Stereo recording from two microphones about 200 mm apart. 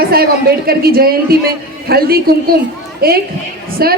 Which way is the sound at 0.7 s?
50° right (ahead or behind).